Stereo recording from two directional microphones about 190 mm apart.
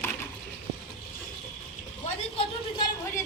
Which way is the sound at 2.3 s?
30° left (ahead or behind).